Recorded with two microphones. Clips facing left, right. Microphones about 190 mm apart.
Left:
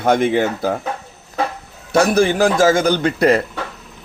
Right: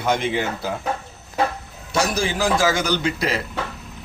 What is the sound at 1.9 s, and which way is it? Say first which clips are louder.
A man's voice: left 8 dB; 55° left (ahead or behind).